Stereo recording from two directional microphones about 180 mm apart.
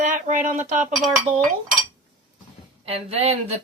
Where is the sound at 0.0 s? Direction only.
45° right (ahead or behind).